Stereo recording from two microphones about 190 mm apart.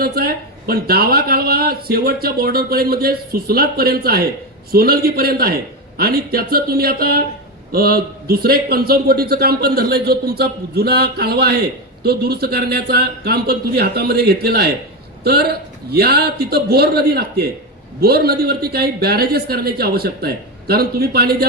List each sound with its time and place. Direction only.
0.0 s a man's voice: 55° right (ahead or behind)